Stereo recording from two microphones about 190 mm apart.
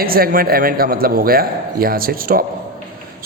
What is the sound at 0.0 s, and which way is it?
A man's voice, 50° right (ahead or behind).